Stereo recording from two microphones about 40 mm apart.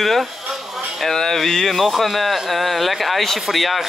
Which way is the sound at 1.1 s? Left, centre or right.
Centre.